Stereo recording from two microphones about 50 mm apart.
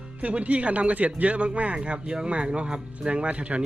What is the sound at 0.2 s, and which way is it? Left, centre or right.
Speech, right.